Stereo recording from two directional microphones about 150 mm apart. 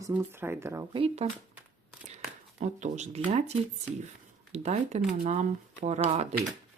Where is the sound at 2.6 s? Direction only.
50° right (ahead or behind).